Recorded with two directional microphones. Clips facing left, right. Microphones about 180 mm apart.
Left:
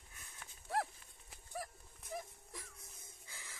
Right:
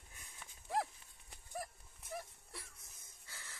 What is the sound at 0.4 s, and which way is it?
Horse, centre (ahead or behind).